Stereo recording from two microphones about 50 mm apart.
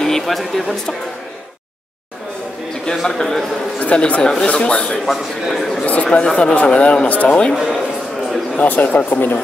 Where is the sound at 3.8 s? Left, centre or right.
Left.